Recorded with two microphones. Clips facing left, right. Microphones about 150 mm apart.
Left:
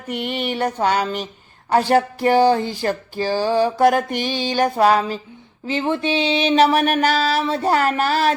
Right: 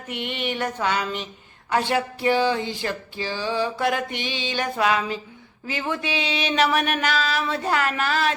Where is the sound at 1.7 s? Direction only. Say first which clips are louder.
Left 6 dB; 40° left (ahead or behind).